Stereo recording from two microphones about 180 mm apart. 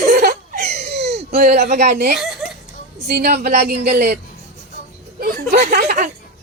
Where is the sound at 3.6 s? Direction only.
65° right (ahead or behind).